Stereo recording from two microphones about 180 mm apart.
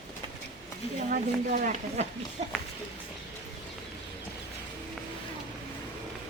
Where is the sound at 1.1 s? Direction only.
50° right (ahead or behind).